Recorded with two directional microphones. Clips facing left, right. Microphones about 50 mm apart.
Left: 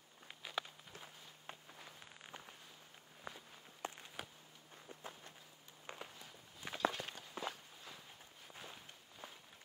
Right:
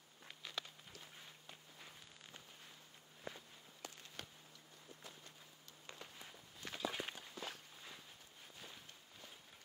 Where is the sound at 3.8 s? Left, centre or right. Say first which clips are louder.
Left 8 dB; left.